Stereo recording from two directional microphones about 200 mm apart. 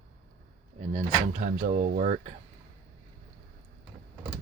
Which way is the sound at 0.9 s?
35° right (ahead or behind).